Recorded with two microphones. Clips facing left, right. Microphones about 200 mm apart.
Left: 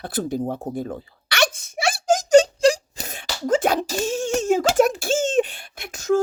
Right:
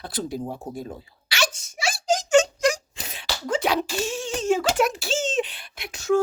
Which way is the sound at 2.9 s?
45° left (ahead or behind).